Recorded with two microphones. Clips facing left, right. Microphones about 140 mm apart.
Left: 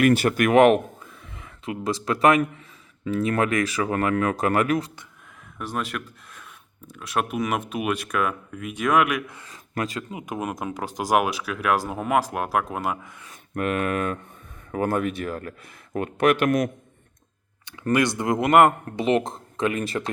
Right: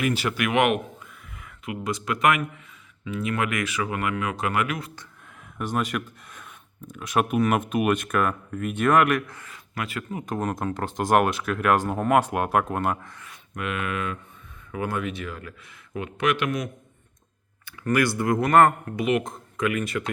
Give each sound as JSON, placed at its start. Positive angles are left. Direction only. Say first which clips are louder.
{"t": 0.0, "sound": "speech", "louder": "left 6 dB", "side_deg": 55}
{"t": 5.5, "sound": "speech", "louder": "right 3 dB", "side_deg": 0}
{"t": 9.7, "sound": "speech", "louder": "left 4 dB", "side_deg": 40}
{"t": 10.1, "sound": "speech", "louder": "right 2 dB", "side_deg": 15}
{"t": 13.6, "sound": "speech", "louder": "left 5 dB", "side_deg": 45}
{"t": 17.8, "sound": "speech", "louder": "left 1 dB", "side_deg": 20}
{"t": 18.9, "sound": "speech", "louder": "left 2 dB", "side_deg": 30}